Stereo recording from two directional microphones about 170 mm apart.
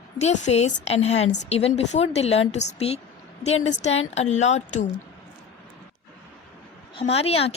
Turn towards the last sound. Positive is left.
turn(degrees=35)  # may be behind; listen again after turning